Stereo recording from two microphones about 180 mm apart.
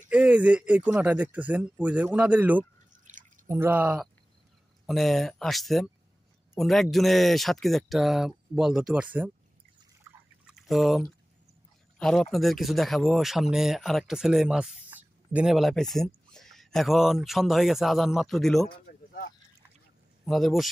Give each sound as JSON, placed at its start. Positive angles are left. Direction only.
{"t": 0.1, "sound": "speech", "side_deg": -5}
{"t": 3.1, "sound": "drip", "side_deg": -45}
{"t": 3.4, "sound": "speech", "side_deg": -15}
{"t": 10.5, "sound": "speech", "side_deg": 0}
{"t": 18.7, "sound": "a sound", "side_deg": 55}
{"t": 20.2, "sound": "speech", "side_deg": 0}